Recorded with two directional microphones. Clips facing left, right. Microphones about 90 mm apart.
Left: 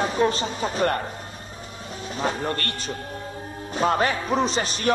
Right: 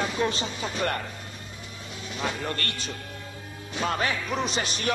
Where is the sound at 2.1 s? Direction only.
35° left (ahead or behind).